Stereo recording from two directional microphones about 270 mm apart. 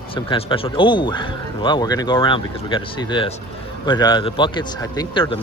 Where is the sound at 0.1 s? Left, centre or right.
Centre.